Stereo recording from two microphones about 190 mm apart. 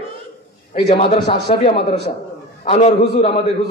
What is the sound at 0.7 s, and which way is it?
A man's voice, 30° left (ahead or behind).